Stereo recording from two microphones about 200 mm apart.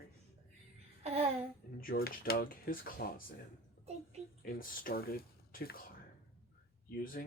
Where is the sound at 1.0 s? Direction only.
30° right (ahead or behind).